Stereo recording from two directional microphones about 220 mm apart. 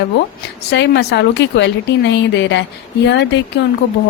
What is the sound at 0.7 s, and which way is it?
Speech, 50° left (ahead or behind).